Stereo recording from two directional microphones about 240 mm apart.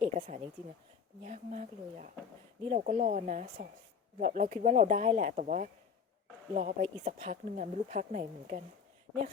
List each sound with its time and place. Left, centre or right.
0.0 s speech: right